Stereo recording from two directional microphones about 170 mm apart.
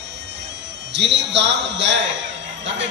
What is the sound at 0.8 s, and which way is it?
A man's voice, 90° right.